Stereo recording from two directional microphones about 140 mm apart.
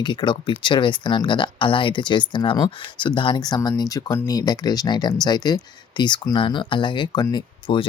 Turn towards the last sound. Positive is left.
turn(degrees=35)  # may be behind; listen again after turning